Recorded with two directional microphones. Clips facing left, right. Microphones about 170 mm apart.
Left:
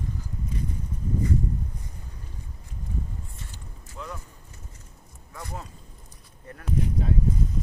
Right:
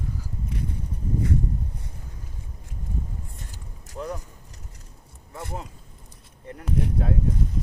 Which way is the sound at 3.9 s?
40° right (ahead or behind).